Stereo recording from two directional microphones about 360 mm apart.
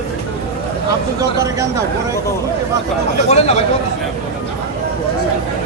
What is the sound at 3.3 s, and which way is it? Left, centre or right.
Speech, centre.